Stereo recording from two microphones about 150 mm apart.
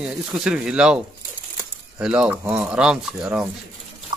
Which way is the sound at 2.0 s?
5° right (ahead or behind).